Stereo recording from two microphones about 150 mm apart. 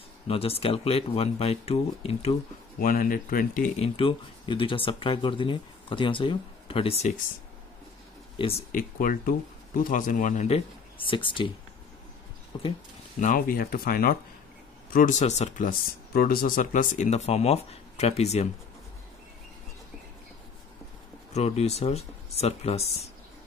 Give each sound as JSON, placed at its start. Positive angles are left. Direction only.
{"t": 0.3, "sound": "speech", "side_deg": 40}
{"t": 2.8, "sound": "speech", "side_deg": 70}
{"t": 3.8, "sound": "speech", "side_deg": 35}
{"t": 8.4, "sound": "speech", "side_deg": 40}
{"t": 8.7, "sound": "speech", "side_deg": 70}
{"t": 11.1, "sound": "speech", "side_deg": 35}
{"t": 12.5, "sound": "speech", "side_deg": 30}
{"t": 13.2, "sound": "speech", "side_deg": 65}
{"t": 14.9, "sound": "speech", "side_deg": 65}
{"t": 21.3, "sound": "speech", "side_deg": 45}